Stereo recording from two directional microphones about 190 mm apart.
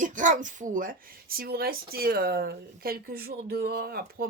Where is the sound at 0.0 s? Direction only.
40° right (ahead or behind).